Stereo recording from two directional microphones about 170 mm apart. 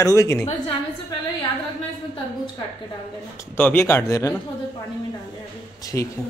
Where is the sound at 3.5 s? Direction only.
10° left (ahead or behind).